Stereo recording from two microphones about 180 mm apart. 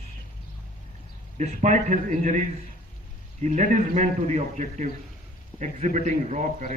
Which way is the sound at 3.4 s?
45° right (ahead or behind).